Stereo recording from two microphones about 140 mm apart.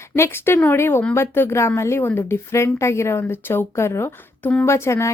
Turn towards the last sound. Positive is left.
turn(degrees=20)  # may be behind; listen again after turning